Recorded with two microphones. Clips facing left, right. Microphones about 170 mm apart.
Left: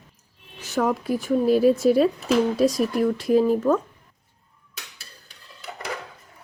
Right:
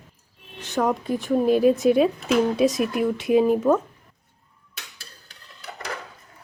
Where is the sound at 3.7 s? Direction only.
25° right (ahead or behind).